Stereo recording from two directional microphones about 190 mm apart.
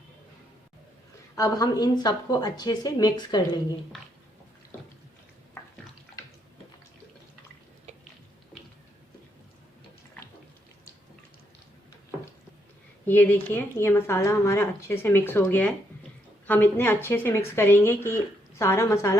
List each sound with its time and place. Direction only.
1.4 s speech: 20° left (ahead or behind)
13.1 s speech: 10° left (ahead or behind)